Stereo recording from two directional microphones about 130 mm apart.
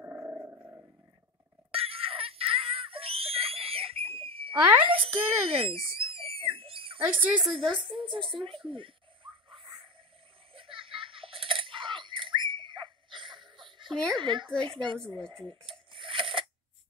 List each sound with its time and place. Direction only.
0.0 s dog: 20° right (ahead or behind)
1.7 s screaming: 45° right (ahead or behind)
4.8 s a child's voice: 45° right (ahead or behind)
5.5 s screaming: 45° right (ahead or behind)
7.0 s a woman's voice: 10° right (ahead or behind)
8.6 s a sound: 40° right (ahead or behind)
13.9 s a woman's voice: 5° left (ahead or behind)
14.2 s speech: 40° right (ahead or behind)
15.0 s a woman's voice: 5° left (ahead or behind)
15.9 s a sound: 40° right (ahead or behind)